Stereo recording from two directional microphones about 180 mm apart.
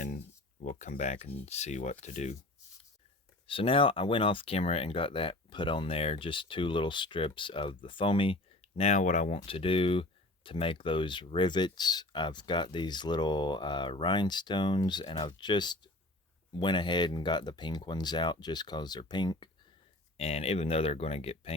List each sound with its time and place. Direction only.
0.6 s speech: 45° left (ahead or behind)
3.4 s speech: 30° left (ahead or behind)